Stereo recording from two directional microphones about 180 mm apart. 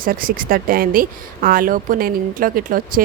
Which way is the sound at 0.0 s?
50° right (ahead or behind).